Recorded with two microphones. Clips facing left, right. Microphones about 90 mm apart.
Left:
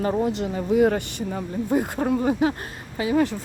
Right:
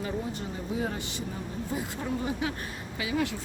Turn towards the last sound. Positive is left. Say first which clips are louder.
# left 8 dB
turn(degrees=40)  # may be behind; listen again after turning